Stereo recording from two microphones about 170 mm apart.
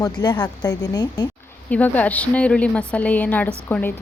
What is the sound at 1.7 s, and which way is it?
Speech, 10° left (ahead or behind).